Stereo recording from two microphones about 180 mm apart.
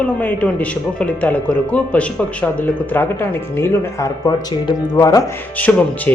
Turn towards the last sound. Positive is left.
turn(degrees=10)  # may be behind; listen again after turning